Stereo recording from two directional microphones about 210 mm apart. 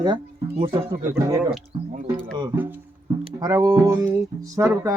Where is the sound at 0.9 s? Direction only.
10° right (ahead or behind).